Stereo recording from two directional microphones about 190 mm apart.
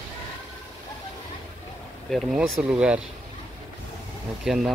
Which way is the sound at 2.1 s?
Centre (ahead or behind).